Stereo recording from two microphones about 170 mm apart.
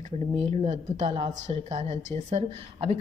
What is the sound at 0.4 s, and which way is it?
A woman's voice, 40° right (ahead or behind).